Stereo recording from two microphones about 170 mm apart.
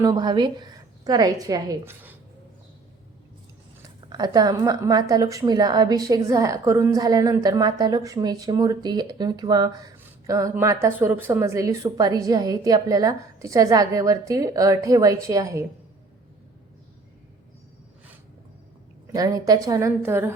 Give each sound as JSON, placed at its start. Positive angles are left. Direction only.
{"t": 0.0, "sound": "a woman's voice", "side_deg": -25}
{"t": 3.8, "sound": "speech", "side_deg": -25}
{"t": 10.0, "sound": "a sound", "side_deg": -20}
{"t": 10.5, "sound": "speech", "side_deg": -15}
{"t": 19.1, "sound": "speech", "side_deg": -20}